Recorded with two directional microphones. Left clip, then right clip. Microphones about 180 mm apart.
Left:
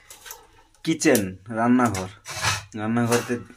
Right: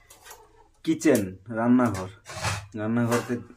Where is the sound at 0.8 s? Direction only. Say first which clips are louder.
Left 2 dB; 15° left (ahead or behind).